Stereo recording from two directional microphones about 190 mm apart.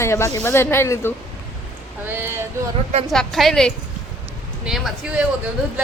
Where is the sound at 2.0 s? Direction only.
10° right (ahead or behind).